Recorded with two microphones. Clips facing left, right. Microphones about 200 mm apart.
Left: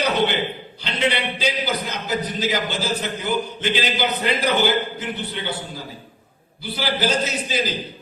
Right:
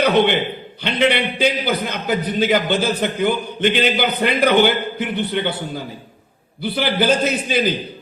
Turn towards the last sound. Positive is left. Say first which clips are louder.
# right 5 dB
turn(degrees=-55)  # may be behind; listen again after turning